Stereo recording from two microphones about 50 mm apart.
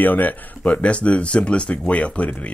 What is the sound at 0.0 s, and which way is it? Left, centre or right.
Speech, left.